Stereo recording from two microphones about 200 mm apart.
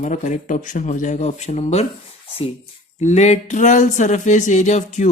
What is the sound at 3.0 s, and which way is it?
Speech, 35° left (ahead or behind).